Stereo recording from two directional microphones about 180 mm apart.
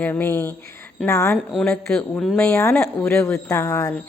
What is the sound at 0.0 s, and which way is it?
Speech, 10° left (ahead or behind).